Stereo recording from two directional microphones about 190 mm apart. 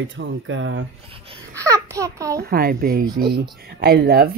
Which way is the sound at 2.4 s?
50° right (ahead or behind).